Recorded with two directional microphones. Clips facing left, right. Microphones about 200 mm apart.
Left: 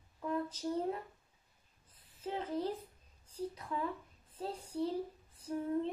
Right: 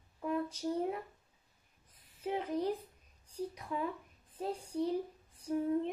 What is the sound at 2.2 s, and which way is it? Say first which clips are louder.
A woman's voice: right 3 dB; 15° right (ahead or behind).